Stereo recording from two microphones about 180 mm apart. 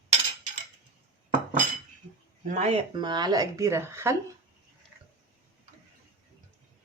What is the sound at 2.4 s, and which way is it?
Speech, 40° right (ahead or behind).